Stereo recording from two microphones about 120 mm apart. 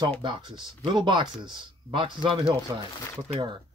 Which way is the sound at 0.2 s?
40° right (ahead or behind).